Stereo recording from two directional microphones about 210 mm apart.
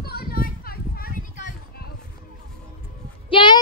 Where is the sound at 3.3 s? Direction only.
25° left (ahead or behind).